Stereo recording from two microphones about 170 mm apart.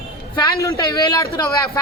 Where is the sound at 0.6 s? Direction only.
20° left (ahead or behind).